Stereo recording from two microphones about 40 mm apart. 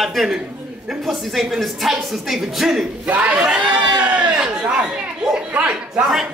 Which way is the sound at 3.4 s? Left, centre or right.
Right.